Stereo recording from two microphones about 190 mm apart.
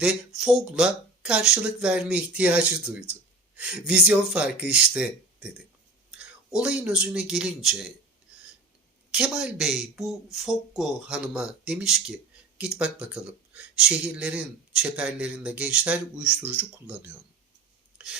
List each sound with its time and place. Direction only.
0.0 s speech: centre (ahead or behind)
9.1 s speech: 5° right (ahead or behind)
17.9 s a sound: 5° right (ahead or behind)